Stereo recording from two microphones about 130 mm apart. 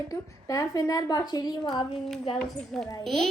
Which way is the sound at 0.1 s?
25° left (ahead or behind).